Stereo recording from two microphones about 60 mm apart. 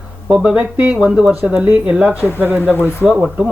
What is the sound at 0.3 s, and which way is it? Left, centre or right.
Speech, centre.